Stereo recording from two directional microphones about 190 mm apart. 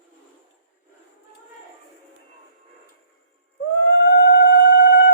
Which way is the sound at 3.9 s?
65° left (ahead or behind).